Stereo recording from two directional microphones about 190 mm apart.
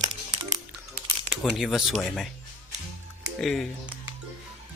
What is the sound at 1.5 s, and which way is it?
Speech, centre (ahead or behind).